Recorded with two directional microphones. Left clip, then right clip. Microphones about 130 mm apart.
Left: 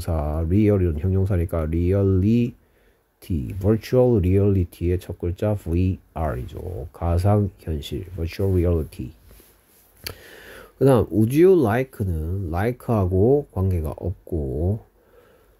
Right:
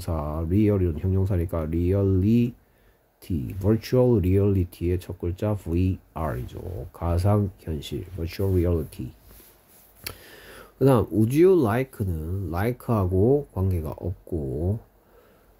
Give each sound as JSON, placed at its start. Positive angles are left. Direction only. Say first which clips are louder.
{"t": 0.0, "sound": "speech", "louder": "left 3 dB", "side_deg": 40}